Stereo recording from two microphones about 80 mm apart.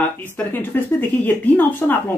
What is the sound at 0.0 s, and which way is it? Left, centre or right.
Speech, left.